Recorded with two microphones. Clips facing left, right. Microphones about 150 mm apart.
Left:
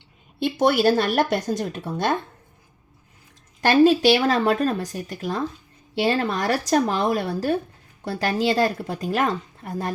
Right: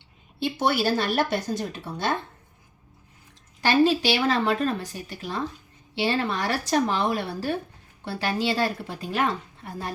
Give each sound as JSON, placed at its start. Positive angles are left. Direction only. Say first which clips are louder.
{"t": 0.6, "sound": "a woman's voice", "louder": "left 6 dB", "side_deg": 50}
{"t": 3.6, "sound": "a woman's voice", "louder": "left 5 dB", "side_deg": 50}